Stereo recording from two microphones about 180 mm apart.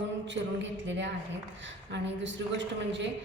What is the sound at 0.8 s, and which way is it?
A woman's voice, 90° right.